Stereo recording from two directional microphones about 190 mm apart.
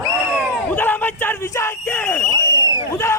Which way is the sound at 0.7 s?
10° left (ahead or behind).